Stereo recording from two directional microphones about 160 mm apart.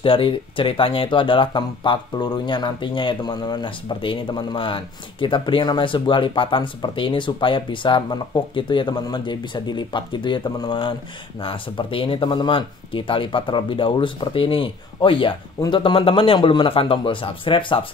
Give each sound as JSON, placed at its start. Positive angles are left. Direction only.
{"t": 0.0, "sound": "speech", "side_deg": 35}